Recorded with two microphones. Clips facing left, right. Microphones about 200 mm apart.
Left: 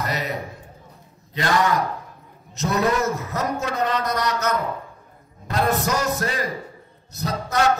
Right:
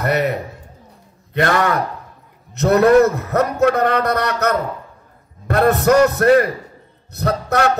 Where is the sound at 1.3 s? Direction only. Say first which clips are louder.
Right 4 dB; 60° right (ahead or behind).